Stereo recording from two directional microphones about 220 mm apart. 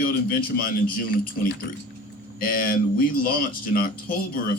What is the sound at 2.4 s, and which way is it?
Speech, 40° left (ahead or behind).